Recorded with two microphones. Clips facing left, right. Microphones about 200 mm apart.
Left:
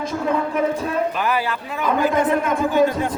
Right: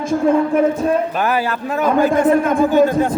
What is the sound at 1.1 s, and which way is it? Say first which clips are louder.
A man's voice: right 4 dB; 45° right (ahead or behind).